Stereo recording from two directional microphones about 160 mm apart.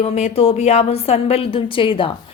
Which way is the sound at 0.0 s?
40° left (ahead or behind).